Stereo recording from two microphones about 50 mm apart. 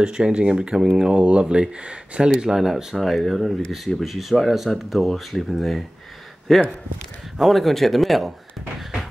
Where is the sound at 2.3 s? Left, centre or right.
Centre.